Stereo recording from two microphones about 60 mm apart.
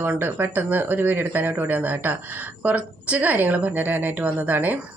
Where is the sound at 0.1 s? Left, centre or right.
Right.